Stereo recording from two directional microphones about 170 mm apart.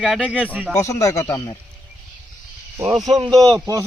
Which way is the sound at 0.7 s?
20° left (ahead or behind).